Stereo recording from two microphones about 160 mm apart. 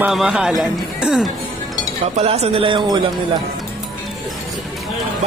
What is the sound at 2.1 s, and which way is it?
Speech, 40° right (ahead or behind).